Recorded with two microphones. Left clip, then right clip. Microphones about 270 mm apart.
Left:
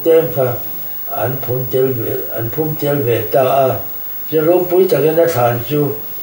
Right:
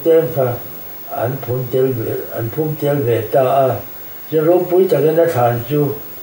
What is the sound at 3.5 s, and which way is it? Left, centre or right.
Speech, right.